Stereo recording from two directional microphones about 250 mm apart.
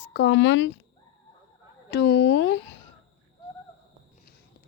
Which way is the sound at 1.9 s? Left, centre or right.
Left.